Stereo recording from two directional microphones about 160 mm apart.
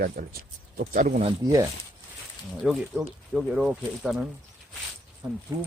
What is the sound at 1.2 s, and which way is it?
Speech, 25° right (ahead or behind).